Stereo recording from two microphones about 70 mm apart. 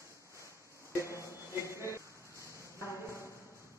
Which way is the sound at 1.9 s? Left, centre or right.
Right.